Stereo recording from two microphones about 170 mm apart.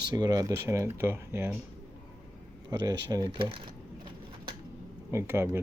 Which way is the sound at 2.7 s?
25° right (ahead or behind).